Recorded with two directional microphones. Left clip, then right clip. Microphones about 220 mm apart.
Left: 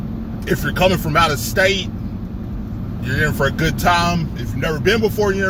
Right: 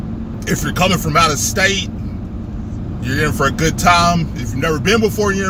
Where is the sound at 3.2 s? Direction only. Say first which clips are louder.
Right 2 dB; 15° right (ahead or behind).